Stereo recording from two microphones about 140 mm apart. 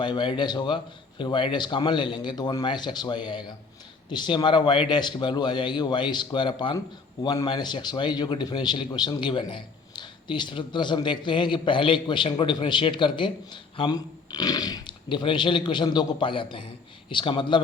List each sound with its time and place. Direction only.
0.0 s a man's voice: 35° left (ahead or behind)